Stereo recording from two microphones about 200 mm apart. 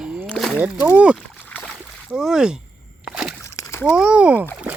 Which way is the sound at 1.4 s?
10° left (ahead or behind).